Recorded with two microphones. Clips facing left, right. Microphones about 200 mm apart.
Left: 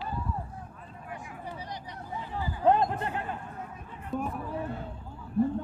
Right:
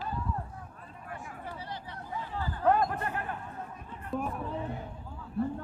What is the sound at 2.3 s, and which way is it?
Chatter, 20° left (ahead or behind).